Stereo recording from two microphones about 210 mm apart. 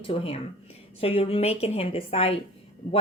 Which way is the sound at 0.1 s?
30° left (ahead or behind).